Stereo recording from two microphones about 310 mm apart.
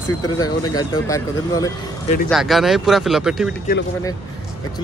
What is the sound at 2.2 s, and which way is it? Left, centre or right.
Speech, centre.